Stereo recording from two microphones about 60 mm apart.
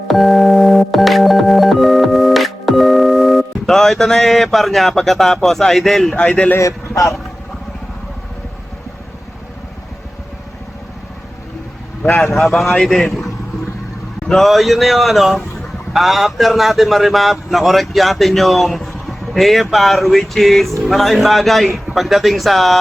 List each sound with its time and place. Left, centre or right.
0.1 s music: centre
6.6 s a man's voice: left
12.0 s a man's voice: centre